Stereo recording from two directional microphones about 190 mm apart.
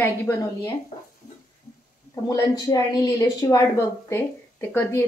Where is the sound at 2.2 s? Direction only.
15° left (ahead or behind).